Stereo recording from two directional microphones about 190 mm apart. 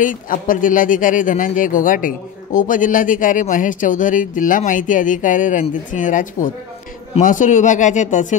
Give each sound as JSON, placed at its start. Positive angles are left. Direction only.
{"t": 0.0, "sound": "speech", "side_deg": 45}